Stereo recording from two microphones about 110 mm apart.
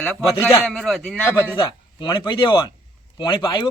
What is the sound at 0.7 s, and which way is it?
Speech, 5° left (ahead or behind).